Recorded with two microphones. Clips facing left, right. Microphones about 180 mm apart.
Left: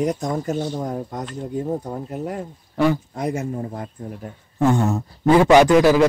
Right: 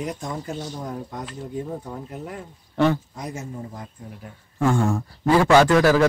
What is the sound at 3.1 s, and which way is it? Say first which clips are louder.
Speech: left 8 dB; 60° left (ahead or behind).